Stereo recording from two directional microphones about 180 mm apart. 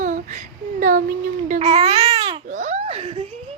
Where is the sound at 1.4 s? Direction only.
40° right (ahead or behind).